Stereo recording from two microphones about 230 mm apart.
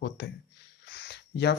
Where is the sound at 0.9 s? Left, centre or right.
Left.